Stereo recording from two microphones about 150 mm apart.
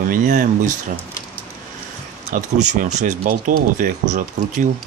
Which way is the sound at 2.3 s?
60° right (ahead or behind).